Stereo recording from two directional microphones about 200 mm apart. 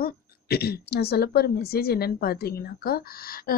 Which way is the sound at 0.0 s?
50° left (ahead or behind).